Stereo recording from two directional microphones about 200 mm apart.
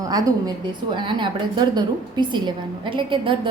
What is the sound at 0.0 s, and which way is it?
A woman's voice, 20° right (ahead or behind).